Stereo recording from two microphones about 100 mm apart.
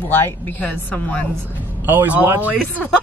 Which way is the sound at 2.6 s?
15° left (ahead or behind).